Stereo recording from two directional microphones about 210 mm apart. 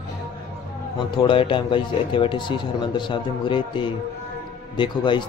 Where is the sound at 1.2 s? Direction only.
25° left (ahead or behind).